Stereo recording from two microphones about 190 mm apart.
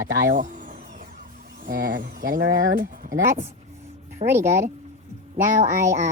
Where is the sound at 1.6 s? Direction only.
50° right (ahead or behind).